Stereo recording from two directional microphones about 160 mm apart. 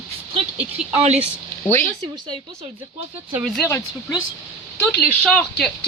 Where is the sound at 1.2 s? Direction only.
15° left (ahead or behind).